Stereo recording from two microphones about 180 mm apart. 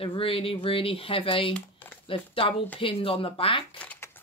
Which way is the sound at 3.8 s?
10° left (ahead or behind).